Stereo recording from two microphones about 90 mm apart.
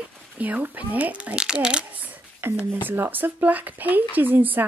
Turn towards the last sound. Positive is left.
turn(degrees=-20)  # may be behind; listen again after turning